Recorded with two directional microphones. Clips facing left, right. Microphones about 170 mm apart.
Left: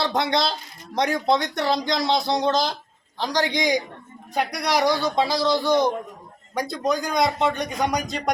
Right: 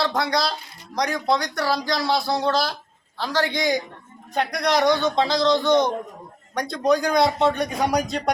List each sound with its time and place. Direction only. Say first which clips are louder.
0.0 s speech: even; 20° left (ahead or behind); by 8.3 s centre (ahead or behind)